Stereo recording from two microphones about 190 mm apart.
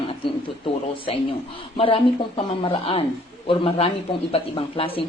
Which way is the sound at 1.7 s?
30° left (ahead or behind).